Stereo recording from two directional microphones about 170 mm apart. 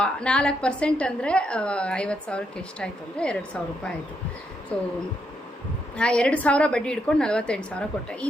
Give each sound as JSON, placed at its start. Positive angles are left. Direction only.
{"t": 0.0, "sound": "a woman's voice", "side_deg": 5}
{"t": 6.0, "sound": "a woman's voice", "side_deg": 5}